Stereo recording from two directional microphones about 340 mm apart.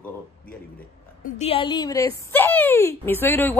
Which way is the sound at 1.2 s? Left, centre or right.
Centre.